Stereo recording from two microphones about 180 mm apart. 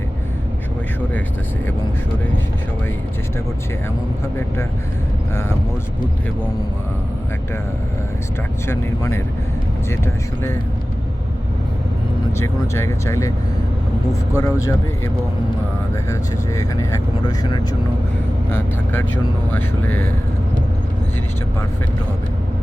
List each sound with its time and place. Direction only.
8.6 s speech: 15° left (ahead or behind)
12.4 s speech: 15° left (ahead or behind)
16.6 s speech: 20° left (ahead or behind)
19.5 s speech: 10° left (ahead or behind)